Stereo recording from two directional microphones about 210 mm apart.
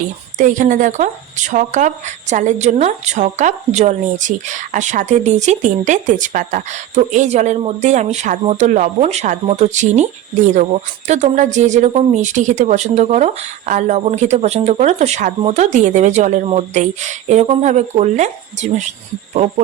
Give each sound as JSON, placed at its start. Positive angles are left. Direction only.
{"t": 0.3, "sound": "speech", "side_deg": -35}